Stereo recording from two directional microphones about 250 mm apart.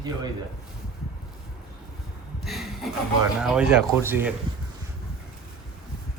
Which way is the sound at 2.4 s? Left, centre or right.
Centre.